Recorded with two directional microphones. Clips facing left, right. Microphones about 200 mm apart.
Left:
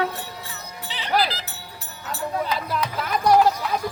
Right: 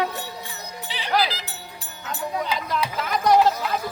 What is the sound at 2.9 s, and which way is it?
Music, 10° left (ahead or behind).